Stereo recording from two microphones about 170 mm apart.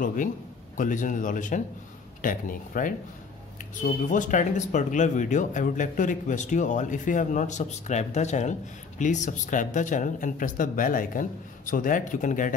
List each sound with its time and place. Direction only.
0.0 s speech: 50° left (ahead or behind)